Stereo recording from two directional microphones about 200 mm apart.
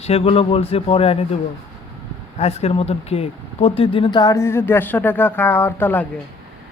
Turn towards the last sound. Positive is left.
turn(degrees=10)  # may be behind; listen again after turning